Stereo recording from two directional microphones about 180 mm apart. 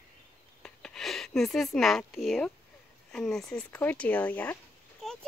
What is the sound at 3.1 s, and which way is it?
Speech, centre (ahead or behind).